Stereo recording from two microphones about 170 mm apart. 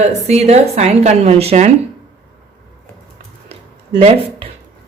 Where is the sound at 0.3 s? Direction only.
40° right (ahead or behind).